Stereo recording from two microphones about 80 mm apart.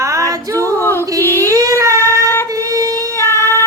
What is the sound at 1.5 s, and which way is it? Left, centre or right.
Child singing, right.